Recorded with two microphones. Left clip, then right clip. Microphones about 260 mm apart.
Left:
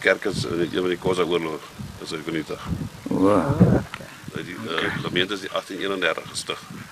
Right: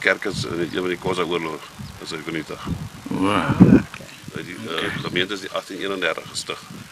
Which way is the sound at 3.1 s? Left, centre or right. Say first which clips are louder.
Left 2 dB; centre.